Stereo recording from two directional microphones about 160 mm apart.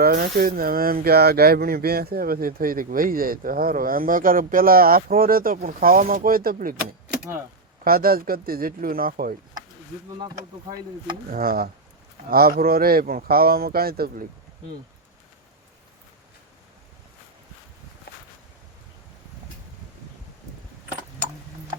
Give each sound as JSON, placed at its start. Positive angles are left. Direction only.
{"t": 0.0, "sound": "speech", "side_deg": -70}
{"t": 7.9, "sound": "speech", "side_deg": -65}
{"t": 10.2, "sound": "speech", "side_deg": -25}
{"t": 11.3, "sound": "speech", "side_deg": -65}
{"t": 18.1, "sound": "a sound", "side_deg": 80}